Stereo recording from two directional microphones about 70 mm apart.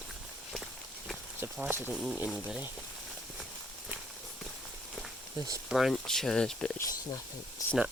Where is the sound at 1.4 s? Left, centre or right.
Right.